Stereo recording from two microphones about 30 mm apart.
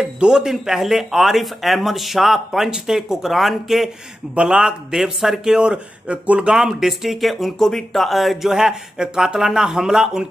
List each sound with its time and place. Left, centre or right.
0.2 s speech: right
0.7 s speech: centre
4.4 s speech: right
4.9 s speech: centre
5.6 s speech: right
6.8 s speech: centre
7.5 s speech: centre
8.5 s speech: centre
8.9 s speech: right
9.4 s speech: centre